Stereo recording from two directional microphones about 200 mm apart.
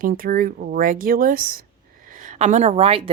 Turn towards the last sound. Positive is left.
turn(degrees=-30)  # may be behind; listen again after turning